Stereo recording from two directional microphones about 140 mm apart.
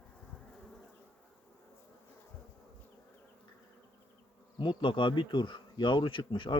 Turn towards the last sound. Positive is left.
turn(degrees=35)  # may be behind; listen again after turning